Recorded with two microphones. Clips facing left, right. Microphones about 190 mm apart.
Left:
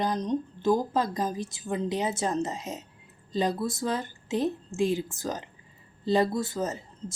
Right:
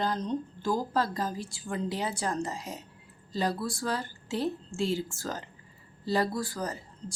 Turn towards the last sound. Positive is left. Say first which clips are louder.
# left 4 dB
turn(degrees=20)  # may be behind; listen again after turning